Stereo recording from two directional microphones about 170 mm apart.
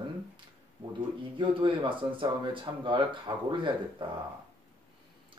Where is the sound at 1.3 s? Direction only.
30° right (ahead or behind).